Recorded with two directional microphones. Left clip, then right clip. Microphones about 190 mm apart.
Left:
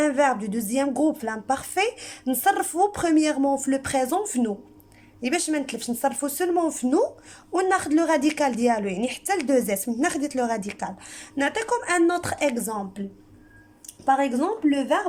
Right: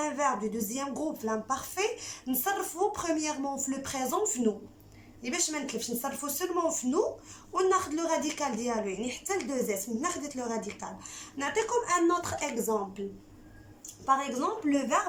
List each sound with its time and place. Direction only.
0.0 s a woman's voice: 55° left (ahead or behind)
14.0 s a woman's voice: 55° left (ahead or behind)